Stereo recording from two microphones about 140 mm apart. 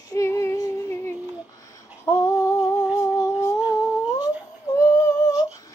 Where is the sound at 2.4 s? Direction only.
25° left (ahead or behind).